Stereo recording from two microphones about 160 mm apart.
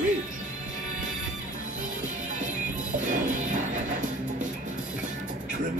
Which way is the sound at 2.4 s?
55° right (ahead or behind).